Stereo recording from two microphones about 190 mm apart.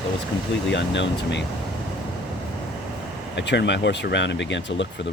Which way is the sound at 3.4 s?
65° left (ahead or behind).